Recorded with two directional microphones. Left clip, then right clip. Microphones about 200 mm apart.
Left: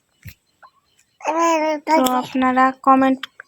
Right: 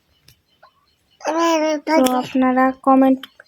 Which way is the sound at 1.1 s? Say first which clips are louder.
Even; 10° right (ahead or behind).